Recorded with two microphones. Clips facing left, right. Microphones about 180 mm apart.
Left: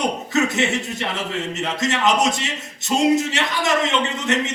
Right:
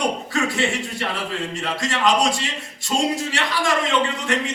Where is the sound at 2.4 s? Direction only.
20° left (ahead or behind).